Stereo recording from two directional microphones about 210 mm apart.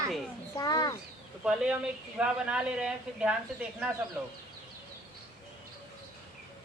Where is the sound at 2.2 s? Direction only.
5° right (ahead or behind).